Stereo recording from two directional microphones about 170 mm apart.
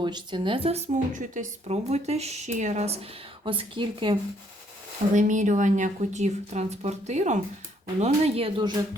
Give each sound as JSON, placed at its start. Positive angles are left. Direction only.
{"t": 0.0, "sound": "a woman's voice", "side_deg": -25}
{"t": 5.1, "sound": "speech", "side_deg": -45}